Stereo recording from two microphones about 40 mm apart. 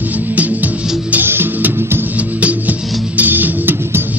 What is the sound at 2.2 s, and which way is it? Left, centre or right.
Music, right.